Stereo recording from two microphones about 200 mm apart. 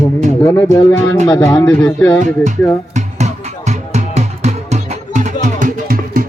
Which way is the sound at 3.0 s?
35° right (ahead or behind).